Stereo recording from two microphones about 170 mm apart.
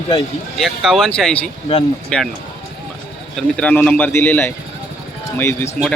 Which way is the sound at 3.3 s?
5° left (ahead or behind).